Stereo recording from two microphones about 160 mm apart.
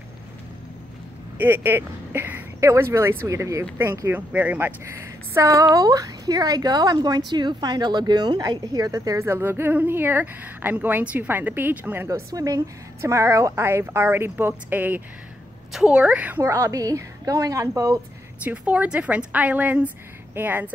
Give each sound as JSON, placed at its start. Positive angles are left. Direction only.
{"t": 1.4, "sound": "a woman's voice", "side_deg": -10}
{"t": 18.4, "sound": "a woman's voice", "side_deg": -10}